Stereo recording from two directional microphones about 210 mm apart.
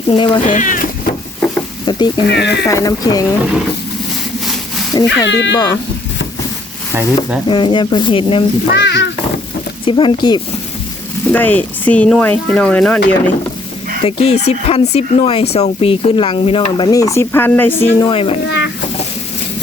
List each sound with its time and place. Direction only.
0.1 s speech: 25° left (ahead or behind)
0.4 s speech: 40° left (ahead or behind)
1.9 s speech: 20° left (ahead or behind)
2.2 s speech: 55° left (ahead or behind)
2.6 s speech: 15° left (ahead or behind)
5.0 s speech: 60° left (ahead or behind)
6.9 s speech: 5° right (ahead or behind)
7.4 s speech: 25° left (ahead or behind)
8.7 s a sound: 55° left (ahead or behind)
9.8 s speech: 25° left (ahead or behind)
11.3 s speech: 10° left (ahead or behind)
14.0 s speech: 25° left (ahead or behind); by 17.8 s 10° left (ahead or behind)
18.0 s speech: 25° left (ahead or behind)
18.4 s a sound: 55° left (ahead or behind)